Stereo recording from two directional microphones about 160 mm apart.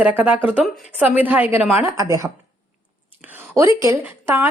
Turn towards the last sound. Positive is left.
turn(degrees=-15)  # may be behind; listen again after turning